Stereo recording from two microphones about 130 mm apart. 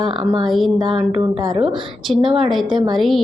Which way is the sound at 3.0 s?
Centre (ahead or behind).